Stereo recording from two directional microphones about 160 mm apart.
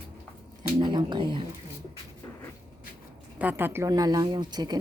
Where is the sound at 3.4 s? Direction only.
10° right (ahead or behind).